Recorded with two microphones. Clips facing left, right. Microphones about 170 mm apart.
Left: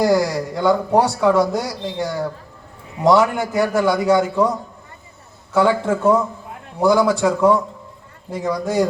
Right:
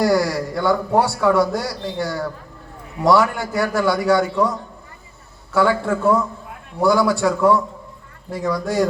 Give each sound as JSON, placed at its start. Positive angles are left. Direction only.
{"t": 0.0, "sound": "speech", "side_deg": 20}
{"t": 5.5, "sound": "speech", "side_deg": 20}